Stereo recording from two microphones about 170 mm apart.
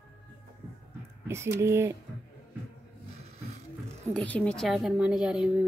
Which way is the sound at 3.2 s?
40° right (ahead or behind).